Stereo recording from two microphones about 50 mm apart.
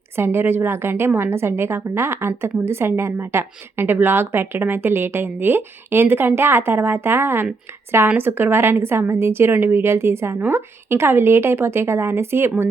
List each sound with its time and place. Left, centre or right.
0.2 s a woman's voice: right